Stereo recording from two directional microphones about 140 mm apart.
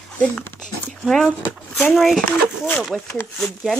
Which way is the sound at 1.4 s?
15° left (ahead or behind).